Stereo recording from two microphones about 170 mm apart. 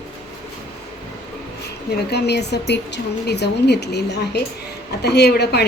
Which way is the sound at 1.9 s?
75° left (ahead or behind).